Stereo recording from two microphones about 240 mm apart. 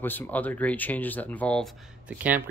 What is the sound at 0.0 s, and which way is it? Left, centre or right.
Speech, centre.